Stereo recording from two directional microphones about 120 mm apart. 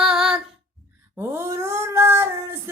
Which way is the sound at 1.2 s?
20° right (ahead or behind).